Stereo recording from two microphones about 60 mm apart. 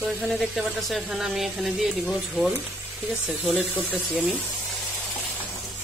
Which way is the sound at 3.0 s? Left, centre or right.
Right.